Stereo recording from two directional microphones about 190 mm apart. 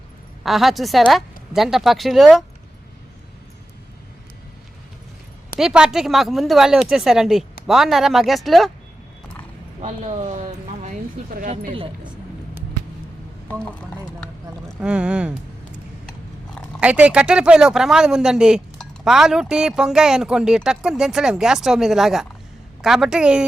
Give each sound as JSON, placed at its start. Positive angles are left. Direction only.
{"t": 0.4, "sound": "speech", "side_deg": 0}
{"t": 5.5, "sound": "speech", "side_deg": -5}
{"t": 9.8, "sound": "speech", "side_deg": -40}
{"t": 11.5, "sound": "speech", "side_deg": -30}
{"t": 13.5, "sound": "speech", "side_deg": 5}
{"t": 14.8, "sound": "speech", "side_deg": -5}
{"t": 16.8, "sound": "speech", "side_deg": -5}